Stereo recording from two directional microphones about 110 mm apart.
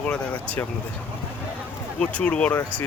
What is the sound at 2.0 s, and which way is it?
Speech, 10° left (ahead or behind).